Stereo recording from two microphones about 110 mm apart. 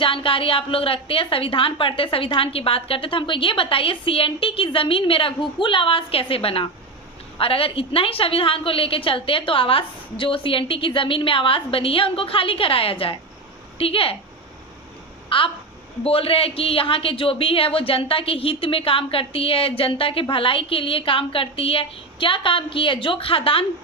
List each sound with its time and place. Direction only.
0.0 s speech: 50° left (ahead or behind)
15.3 s speech: 55° left (ahead or behind)